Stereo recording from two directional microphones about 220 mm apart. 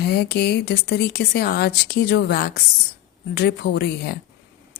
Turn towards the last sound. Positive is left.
turn(degrees=45)  # may be behind; listen again after turning